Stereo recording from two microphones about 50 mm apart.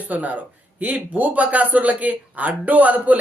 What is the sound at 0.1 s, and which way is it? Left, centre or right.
Speech, right.